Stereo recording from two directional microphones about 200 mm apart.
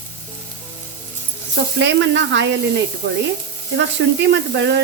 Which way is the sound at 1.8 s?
60° right (ahead or behind).